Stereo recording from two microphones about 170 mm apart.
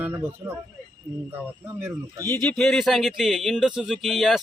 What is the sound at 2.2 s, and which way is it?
Speech, 10° left (ahead or behind).